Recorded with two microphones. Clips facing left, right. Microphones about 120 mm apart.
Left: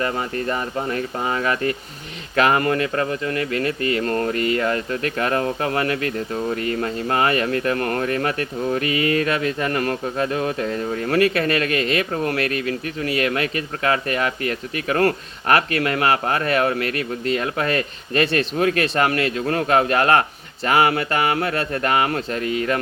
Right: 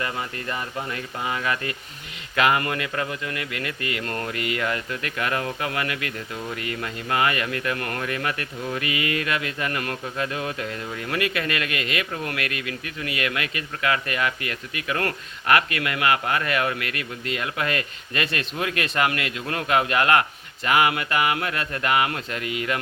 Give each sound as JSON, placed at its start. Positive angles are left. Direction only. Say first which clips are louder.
{"t": 0.0, "sound": "speech", "louder": "left 6 dB", "side_deg": 40}